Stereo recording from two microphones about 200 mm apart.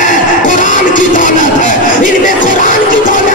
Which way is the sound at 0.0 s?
40° left (ahead or behind).